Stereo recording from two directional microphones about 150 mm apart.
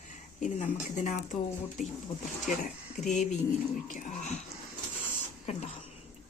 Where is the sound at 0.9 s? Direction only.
55° left (ahead or behind).